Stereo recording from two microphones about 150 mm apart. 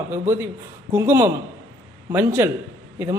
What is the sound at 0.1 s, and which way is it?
Speech, 15° right (ahead or behind).